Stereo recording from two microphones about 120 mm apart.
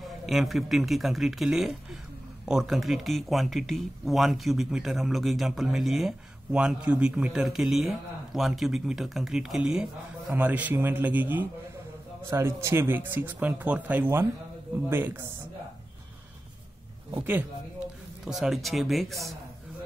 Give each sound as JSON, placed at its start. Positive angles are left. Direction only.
{"t": 0.3, "sound": "speech", "side_deg": 0}
{"t": 17.2, "sound": "speech", "side_deg": -15}
{"t": 18.2, "sound": "speech", "side_deg": 0}